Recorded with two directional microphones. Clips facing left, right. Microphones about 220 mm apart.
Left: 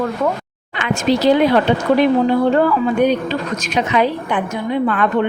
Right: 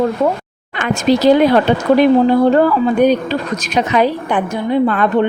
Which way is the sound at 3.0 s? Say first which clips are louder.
Right 3 dB; 40° right (ahead or behind).